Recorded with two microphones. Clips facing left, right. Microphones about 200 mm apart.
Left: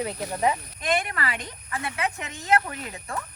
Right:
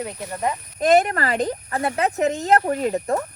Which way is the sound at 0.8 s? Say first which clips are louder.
Right 10 dB; 45° right (ahead or behind).